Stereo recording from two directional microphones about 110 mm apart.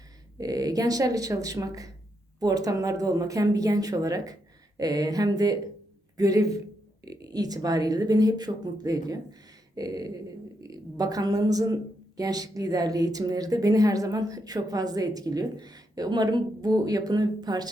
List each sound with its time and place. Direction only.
0.3 s a woman's voice: 35° right (ahead or behind)